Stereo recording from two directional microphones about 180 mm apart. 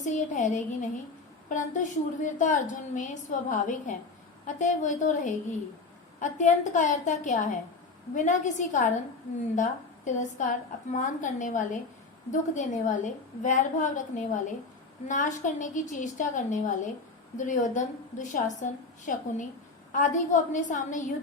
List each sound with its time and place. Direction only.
0.0 s a woman's voice: 45° left (ahead or behind)